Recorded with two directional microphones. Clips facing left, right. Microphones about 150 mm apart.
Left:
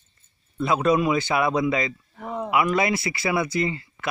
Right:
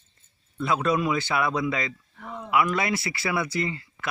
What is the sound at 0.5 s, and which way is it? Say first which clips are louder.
Speech: left 4 dB; 15° left (ahead or behind).